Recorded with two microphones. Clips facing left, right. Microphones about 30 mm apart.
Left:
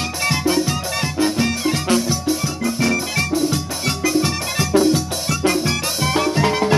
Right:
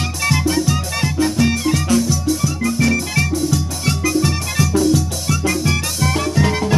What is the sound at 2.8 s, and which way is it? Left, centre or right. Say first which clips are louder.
Music: right 2 dB; centre.